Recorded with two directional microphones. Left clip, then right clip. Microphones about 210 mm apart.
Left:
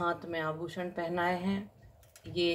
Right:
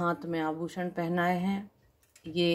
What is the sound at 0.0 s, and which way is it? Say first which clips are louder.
Speech: right 2 dB; 45° right (ahead or behind).